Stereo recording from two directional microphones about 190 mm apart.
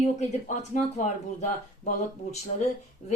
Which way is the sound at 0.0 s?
40° left (ahead or behind).